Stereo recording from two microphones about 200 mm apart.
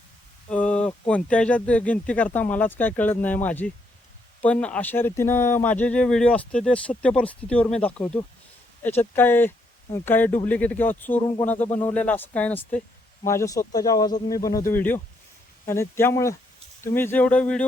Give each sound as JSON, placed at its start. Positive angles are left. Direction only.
{"t": 0.5, "sound": "speech", "side_deg": 5}